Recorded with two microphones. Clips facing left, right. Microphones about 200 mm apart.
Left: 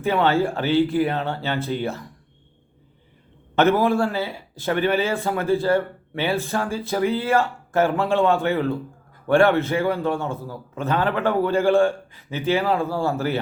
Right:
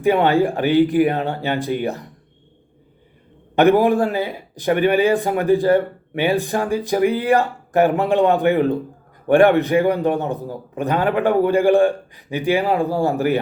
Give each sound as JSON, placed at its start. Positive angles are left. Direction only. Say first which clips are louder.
{"t": 0.0, "sound": "speech", "louder": "right 4 dB", "side_deg": -15}
{"t": 3.5, "sound": "speech", "louder": "right 4 dB", "side_deg": -15}